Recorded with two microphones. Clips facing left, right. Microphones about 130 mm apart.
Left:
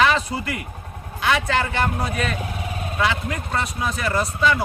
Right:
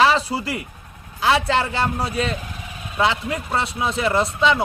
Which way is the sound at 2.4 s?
60° left (ahead or behind).